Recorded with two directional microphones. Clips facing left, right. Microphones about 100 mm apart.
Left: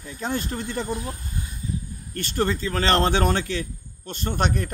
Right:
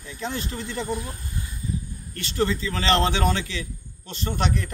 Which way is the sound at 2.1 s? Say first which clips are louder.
Even; 50° left (ahead or behind).